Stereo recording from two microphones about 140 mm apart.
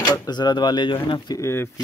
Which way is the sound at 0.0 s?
30° left (ahead or behind).